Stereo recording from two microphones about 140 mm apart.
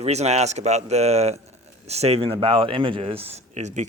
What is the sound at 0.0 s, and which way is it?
A man's voice, 50° right (ahead or behind).